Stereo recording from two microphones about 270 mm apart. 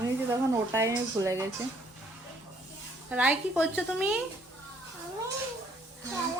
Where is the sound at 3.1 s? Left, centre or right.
Centre.